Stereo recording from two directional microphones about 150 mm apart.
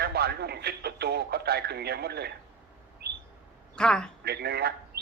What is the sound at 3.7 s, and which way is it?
Speech, 5° left (ahead or behind).